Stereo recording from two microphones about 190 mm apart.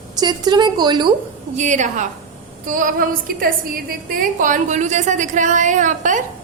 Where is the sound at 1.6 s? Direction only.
40° right (ahead or behind).